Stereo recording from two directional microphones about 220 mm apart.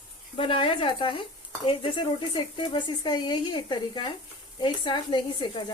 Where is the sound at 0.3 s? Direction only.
25° left (ahead or behind).